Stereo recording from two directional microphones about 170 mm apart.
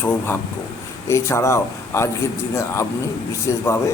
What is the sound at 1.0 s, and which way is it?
Speech, 15° left (ahead or behind).